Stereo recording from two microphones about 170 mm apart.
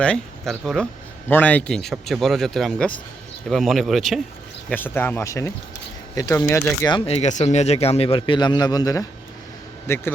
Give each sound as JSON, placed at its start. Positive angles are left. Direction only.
{"t": 0.0, "sound": "speech", "side_deg": 5}
{"t": 4.7, "sound": "speech", "side_deg": 10}
{"t": 6.9, "sound": "a man's voice", "side_deg": 35}